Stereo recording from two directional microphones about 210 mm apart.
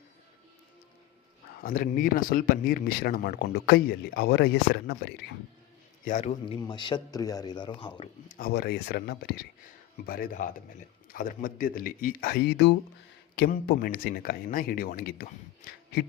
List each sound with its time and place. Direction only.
1.6 s speech: 40° left (ahead or behind)
6.1 s a man's voice: 35° left (ahead or behind)
6.4 s speech: 20° left (ahead or behind)
8.3 s speech: 45° left (ahead or behind)